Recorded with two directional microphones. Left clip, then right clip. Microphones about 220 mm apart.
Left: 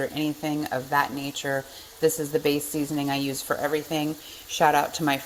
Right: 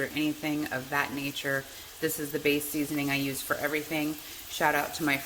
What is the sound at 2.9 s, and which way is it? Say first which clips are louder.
Speech: left 2 dB; 20° left (ahead or behind).